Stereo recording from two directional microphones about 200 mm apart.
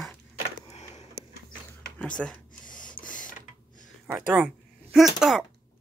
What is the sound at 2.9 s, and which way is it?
Printer, 40° left (ahead or behind).